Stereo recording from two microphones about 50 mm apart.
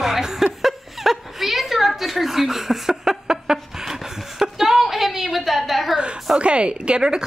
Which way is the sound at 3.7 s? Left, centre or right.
Centre.